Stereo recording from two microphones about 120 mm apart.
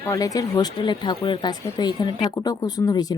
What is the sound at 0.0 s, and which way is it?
Speech, 30° left (ahead or behind).